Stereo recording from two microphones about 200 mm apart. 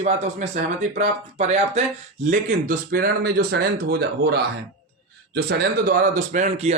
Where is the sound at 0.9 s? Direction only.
35° right (ahead or behind).